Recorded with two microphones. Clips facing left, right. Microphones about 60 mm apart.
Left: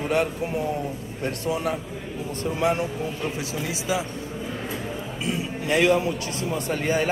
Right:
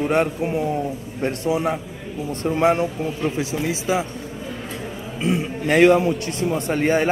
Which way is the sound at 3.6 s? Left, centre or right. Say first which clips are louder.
Right 4 dB; right.